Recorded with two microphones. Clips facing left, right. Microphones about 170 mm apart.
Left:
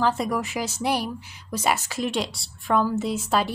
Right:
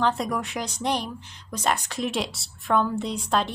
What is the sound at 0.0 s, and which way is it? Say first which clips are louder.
A woman's voice: left 1 dB; centre (ahead or behind).